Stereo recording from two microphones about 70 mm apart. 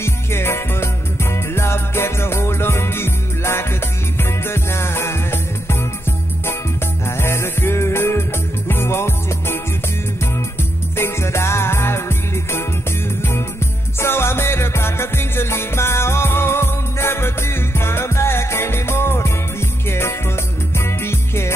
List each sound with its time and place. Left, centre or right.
0.0 s music: left
11.0 s music: left
13.9 s music: left